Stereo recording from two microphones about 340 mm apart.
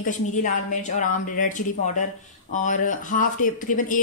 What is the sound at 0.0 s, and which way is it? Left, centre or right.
Speech, left.